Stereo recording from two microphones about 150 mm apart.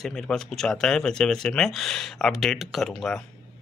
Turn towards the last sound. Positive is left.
turn(degrees=5)  # may be behind; listen again after turning